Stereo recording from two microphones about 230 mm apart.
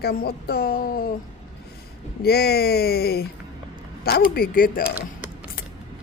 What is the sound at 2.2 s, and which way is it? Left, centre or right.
A woman's voice, left.